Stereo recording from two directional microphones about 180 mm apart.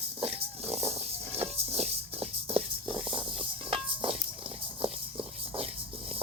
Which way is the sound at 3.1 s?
30° right (ahead or behind).